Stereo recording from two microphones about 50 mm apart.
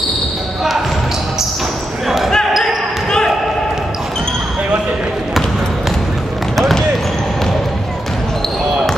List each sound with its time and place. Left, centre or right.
2.0 s basketball bounce: centre
2.6 s basketball bounce: centre
6.5 s basketball bounce: centre